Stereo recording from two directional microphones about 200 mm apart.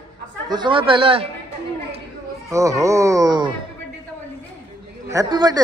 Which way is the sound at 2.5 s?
15° right (ahead or behind).